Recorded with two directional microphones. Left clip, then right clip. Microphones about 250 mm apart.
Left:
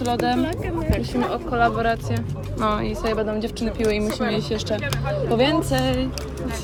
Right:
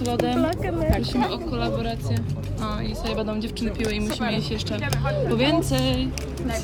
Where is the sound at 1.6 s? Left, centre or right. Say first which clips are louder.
Left 11 dB; centre.